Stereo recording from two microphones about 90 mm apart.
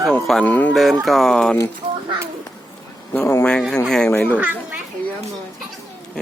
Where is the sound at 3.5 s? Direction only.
5° left (ahead or behind).